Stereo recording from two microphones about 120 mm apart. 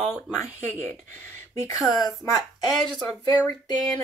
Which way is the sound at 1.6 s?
30° left (ahead or behind).